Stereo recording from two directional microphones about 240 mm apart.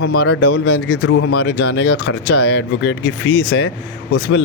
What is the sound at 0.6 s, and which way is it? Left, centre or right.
Speech, left.